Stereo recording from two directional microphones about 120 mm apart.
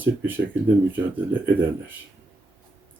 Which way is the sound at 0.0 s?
15° right (ahead or behind).